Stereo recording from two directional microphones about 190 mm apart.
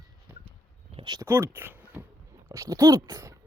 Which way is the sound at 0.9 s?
20° right (ahead or behind).